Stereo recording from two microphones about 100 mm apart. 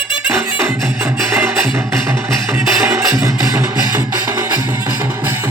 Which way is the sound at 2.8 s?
30° right (ahead or behind).